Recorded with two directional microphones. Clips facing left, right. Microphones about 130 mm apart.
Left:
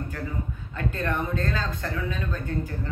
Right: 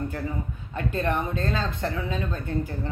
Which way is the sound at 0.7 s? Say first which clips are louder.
Right 2 dB; 20° right (ahead or behind).